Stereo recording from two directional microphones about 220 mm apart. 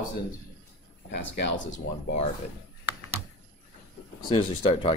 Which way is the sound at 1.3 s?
55° left (ahead or behind).